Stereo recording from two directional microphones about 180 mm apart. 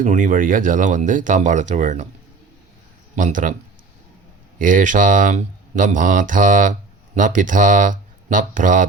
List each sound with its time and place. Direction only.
0.0 s speech: 45° right (ahead or behind)
3.2 s speech: 45° right (ahead or behind)
4.5 s speech: 45° right (ahead or behind)